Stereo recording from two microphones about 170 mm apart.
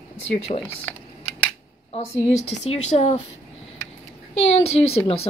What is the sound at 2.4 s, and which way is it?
Speech, 40° left (ahead or behind).